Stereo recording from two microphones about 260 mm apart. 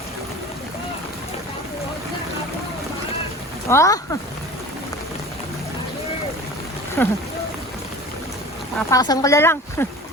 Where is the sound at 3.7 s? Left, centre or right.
Centre.